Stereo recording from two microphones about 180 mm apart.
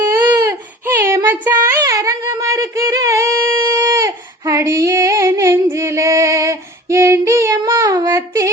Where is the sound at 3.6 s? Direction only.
20° right (ahead or behind).